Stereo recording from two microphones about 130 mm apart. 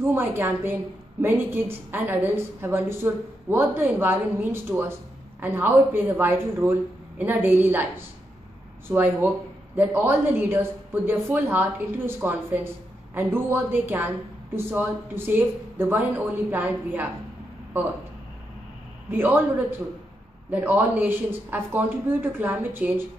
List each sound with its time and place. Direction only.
0.1 s a woman's voice: 15° right (ahead or behind)
19.0 s a woman's voice: 15° right (ahead or behind)
20.4 s a woman's voice: 15° right (ahead or behind)